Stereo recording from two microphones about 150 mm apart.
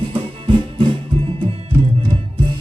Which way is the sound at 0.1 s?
35° right (ahead or behind).